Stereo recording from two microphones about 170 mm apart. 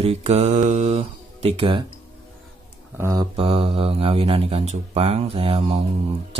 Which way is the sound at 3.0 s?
20° right (ahead or behind).